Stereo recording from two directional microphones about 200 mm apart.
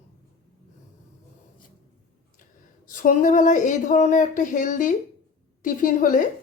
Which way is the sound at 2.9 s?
40° left (ahead or behind).